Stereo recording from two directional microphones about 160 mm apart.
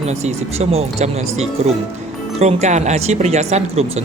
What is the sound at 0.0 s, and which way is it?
Speech, 40° right (ahead or behind).